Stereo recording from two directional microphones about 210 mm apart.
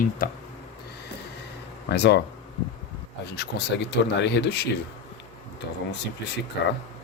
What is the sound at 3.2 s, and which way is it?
Speech, 50° left (ahead or behind).